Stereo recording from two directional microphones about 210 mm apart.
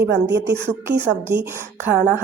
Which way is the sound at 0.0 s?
15° right (ahead or behind).